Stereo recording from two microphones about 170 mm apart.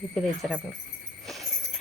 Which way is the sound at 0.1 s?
5° left (ahead or behind).